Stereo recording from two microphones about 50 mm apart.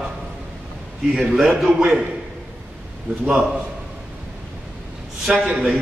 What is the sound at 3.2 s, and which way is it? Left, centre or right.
Speech, centre.